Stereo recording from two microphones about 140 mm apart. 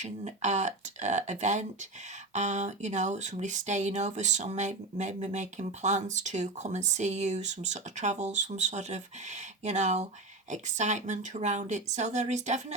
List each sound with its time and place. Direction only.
0.0 s speech: 55° right (ahead or behind)